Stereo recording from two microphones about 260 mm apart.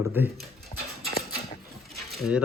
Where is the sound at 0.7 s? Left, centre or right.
Left.